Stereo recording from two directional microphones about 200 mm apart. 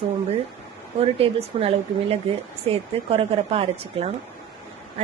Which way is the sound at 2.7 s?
30° right (ahead or behind).